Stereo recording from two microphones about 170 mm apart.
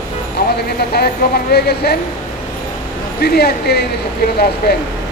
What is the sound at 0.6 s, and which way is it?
Speech, 70° left (ahead or behind).